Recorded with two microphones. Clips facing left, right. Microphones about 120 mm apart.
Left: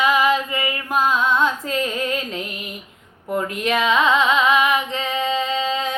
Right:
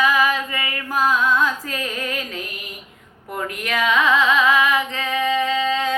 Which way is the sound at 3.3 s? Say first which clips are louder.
Left 4 dB; 25° left (ahead or behind).